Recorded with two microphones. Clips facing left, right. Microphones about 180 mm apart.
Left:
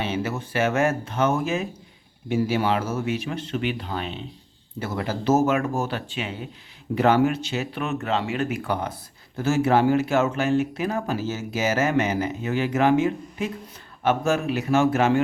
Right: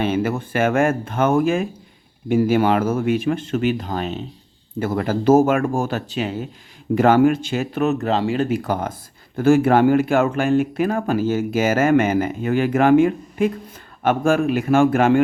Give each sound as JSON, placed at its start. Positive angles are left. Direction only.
{"t": 0.0, "sound": "speech", "side_deg": -50}